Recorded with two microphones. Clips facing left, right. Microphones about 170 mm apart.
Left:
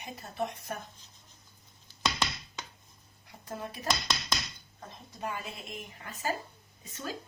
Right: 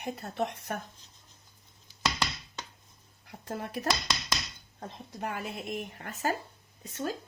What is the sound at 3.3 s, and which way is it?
Speech, 70° right (ahead or behind).